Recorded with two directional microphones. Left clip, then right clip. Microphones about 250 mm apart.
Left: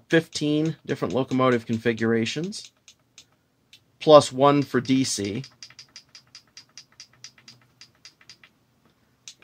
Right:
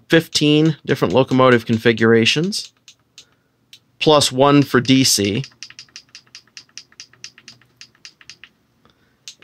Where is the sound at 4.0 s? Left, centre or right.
Right.